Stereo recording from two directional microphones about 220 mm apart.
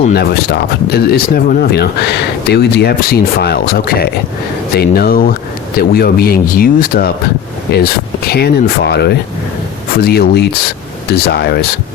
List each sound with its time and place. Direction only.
0.1 s speech: 45° left (ahead or behind)